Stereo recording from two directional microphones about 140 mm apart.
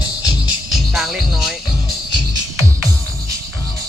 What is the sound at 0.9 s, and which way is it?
Speech, centre (ahead or behind).